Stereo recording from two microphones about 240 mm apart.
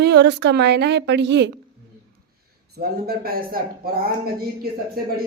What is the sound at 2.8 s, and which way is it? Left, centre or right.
A man's voice, right.